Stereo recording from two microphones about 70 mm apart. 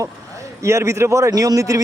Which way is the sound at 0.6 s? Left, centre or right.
Right.